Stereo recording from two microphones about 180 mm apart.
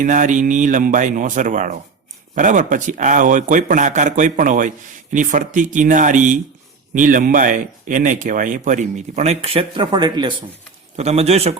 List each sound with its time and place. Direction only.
0.0 s speech: 45° right (ahead or behind); by 10.3 s 25° right (ahead or behind)
10.9 s speech: 35° right (ahead or behind)